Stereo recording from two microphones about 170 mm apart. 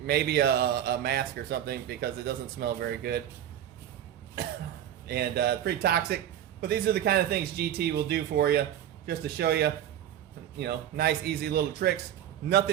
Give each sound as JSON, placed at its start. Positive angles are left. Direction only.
{"t": 0.1, "sound": "speech", "side_deg": -70}
{"t": 5.0, "sound": "speech", "side_deg": -70}